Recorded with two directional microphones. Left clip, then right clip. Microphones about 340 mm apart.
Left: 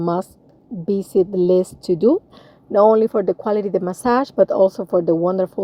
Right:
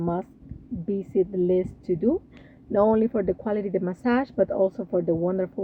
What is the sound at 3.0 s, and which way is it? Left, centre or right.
Speech, centre.